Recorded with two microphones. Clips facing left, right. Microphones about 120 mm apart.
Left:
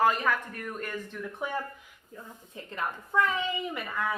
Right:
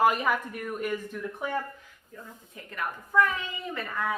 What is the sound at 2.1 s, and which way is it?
A child's voice, 25° left (ahead or behind).